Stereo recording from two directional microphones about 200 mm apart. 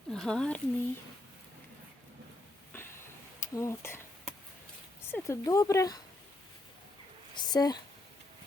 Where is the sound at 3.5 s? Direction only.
15° left (ahead or behind).